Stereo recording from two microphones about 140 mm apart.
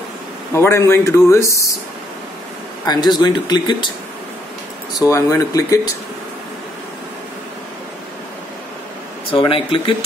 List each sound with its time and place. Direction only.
0.6 s speech: 20° left (ahead or behind)
2.8 s speech: 30° left (ahead or behind)
5.1 s speech: 25° left (ahead or behind)
9.3 s speech: 40° left (ahead or behind)